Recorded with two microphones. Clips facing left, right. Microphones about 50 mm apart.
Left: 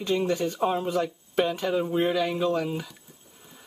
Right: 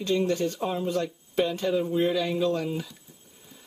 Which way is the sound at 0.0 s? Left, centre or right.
Centre.